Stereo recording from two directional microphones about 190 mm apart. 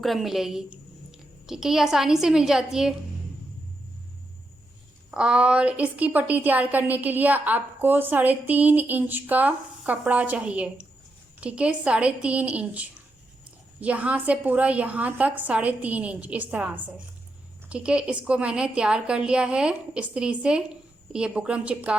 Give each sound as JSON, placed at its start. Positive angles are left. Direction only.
{"t": 0.0, "sound": "a woman's voice", "side_deg": 0}
{"t": 5.1, "sound": "a woman's voice", "side_deg": -5}